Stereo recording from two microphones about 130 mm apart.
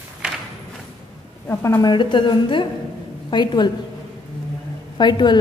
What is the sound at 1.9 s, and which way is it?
A woman's voice, 35° left (ahead or behind).